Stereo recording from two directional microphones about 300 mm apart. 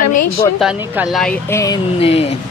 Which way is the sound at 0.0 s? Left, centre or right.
Left.